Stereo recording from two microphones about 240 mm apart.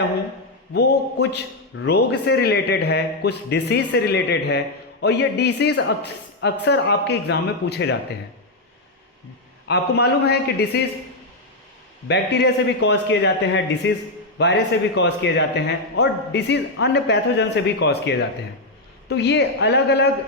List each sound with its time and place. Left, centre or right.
0.7 s a man's voice: left
9.6 s a man's voice: left
12.0 s a man's voice: left